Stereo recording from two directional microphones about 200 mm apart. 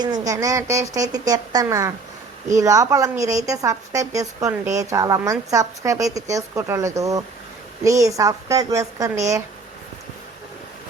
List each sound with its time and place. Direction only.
0.0 s a woman's voice: 20° right (ahead or behind)